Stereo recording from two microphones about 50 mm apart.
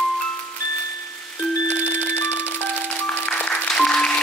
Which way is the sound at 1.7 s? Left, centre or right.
Left.